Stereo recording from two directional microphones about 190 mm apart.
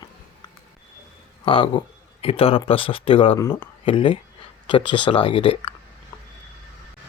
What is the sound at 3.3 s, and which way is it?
Speech, 15° left (ahead or behind).